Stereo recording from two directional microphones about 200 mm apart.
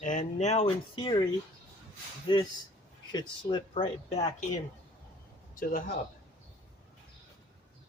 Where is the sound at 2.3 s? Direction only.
25° left (ahead or behind).